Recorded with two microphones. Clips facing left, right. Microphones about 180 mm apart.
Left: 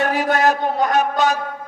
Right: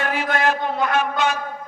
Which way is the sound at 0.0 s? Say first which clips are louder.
Left 4 dB; 40° left (ahead or behind).